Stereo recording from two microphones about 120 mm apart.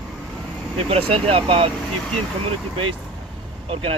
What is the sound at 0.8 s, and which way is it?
Speech, 50° right (ahead or behind).